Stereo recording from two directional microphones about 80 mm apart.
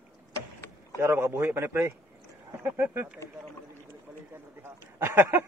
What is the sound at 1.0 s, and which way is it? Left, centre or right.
A man's voice, right.